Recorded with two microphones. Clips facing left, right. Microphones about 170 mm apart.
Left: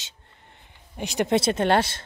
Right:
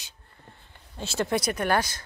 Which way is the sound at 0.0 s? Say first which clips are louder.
Right 1 dB; 20° left (ahead or behind).